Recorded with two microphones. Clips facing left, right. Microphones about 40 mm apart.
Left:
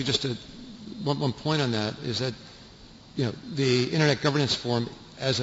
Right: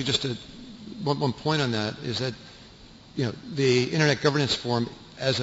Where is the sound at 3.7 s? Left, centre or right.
Centre.